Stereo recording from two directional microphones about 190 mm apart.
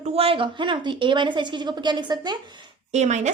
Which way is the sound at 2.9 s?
35° right (ahead or behind).